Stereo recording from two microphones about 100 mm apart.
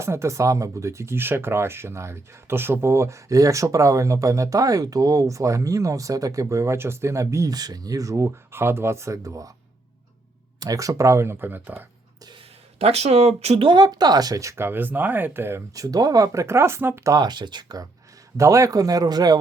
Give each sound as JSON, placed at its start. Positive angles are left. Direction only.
{"t": 0.0, "sound": "speech", "side_deg": -30}
{"t": 10.6, "sound": "speech", "side_deg": -35}
{"t": 12.8, "sound": "speech", "side_deg": -90}
{"t": 13.7, "sound": "speech", "side_deg": -45}
{"t": 15.7, "sound": "speech", "side_deg": -35}
{"t": 17.2, "sound": "speech", "side_deg": -45}
{"t": 18.3, "sound": "speech", "side_deg": -30}